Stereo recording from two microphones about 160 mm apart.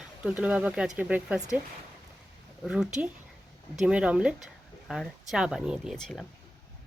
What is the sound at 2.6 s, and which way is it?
Speech, 5° right (ahead or behind).